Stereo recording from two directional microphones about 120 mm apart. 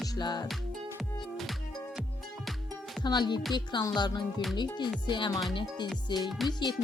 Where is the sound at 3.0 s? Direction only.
40° left (ahead or behind).